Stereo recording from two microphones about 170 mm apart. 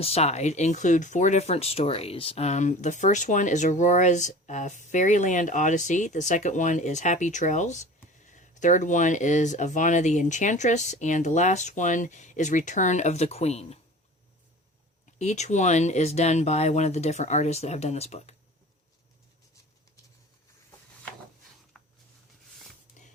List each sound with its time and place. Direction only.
0.0 s speech: 40° left (ahead or behind)
15.2 s speech: 40° left (ahead or behind)
23.0 s music: 45° left (ahead or behind)